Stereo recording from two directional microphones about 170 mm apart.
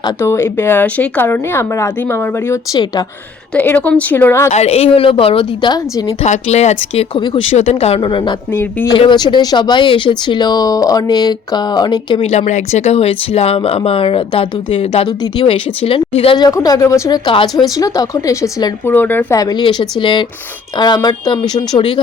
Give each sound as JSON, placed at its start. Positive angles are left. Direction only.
{"t": 0.2, "sound": "speech", "side_deg": 15}
{"t": 3.5, "sound": "speech", "side_deg": 10}
{"t": 4.5, "sound": "speech", "side_deg": 40}
{"t": 6.2, "sound": "speech", "side_deg": 40}
{"t": 12.3, "sound": "speech", "side_deg": 45}
{"t": 16.5, "sound": "speech", "side_deg": 20}